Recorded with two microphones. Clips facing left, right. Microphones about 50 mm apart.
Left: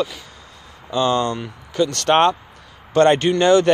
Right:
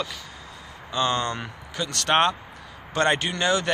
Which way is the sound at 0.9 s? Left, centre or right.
Centre.